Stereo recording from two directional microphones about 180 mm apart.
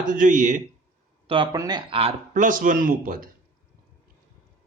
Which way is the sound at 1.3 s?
25° right (ahead or behind).